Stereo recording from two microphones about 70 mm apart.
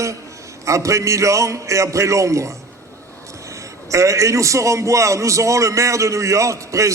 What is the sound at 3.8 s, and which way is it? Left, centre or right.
A man's voice, right.